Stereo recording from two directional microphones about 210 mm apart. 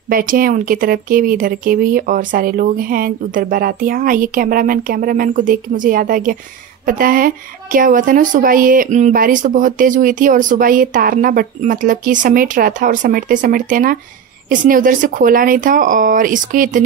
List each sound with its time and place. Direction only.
0.1 s a woman's voice: 40° right (ahead or behind)